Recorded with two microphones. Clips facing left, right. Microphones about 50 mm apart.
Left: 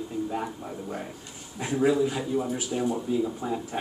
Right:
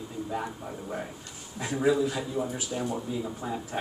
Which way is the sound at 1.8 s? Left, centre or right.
Centre.